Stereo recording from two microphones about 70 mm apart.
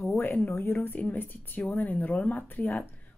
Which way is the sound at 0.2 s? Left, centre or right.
Left.